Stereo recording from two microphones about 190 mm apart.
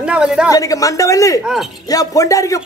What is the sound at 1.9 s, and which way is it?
Speech, 20° left (ahead or behind).